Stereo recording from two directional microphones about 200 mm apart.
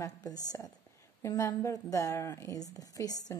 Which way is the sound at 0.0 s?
20° left (ahead or behind).